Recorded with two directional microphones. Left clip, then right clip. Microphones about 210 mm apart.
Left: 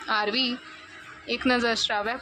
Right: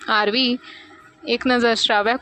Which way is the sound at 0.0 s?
35° right (ahead or behind).